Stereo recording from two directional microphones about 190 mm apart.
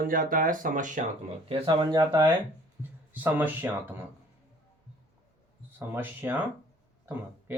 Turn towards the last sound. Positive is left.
turn(degrees=-10)  # may be behind; listen again after turning